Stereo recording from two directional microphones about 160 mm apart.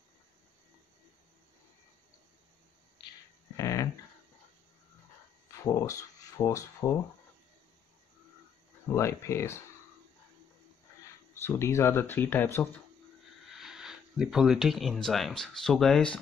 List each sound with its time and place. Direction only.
3.5 s a sound: 20° left (ahead or behind)
5.6 s speech: 20° left (ahead or behind)
8.9 s speech: 15° left (ahead or behind)
11.4 s speech: 15° left (ahead or behind)
13.5 s speech: 5° right (ahead or behind)